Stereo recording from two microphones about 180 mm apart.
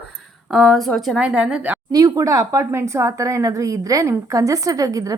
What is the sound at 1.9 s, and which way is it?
A woman's voice, 20° right (ahead or behind).